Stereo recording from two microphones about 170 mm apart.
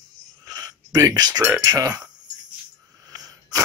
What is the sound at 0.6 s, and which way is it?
Speech, 20° right (ahead or behind).